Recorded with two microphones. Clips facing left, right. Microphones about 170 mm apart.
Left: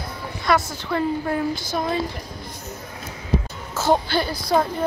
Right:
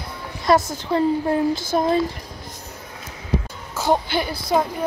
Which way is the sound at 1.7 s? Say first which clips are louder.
Right 6 dB; 35° right (ahead or behind).